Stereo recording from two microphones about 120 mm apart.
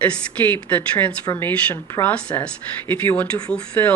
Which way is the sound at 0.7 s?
10° left (ahead or behind).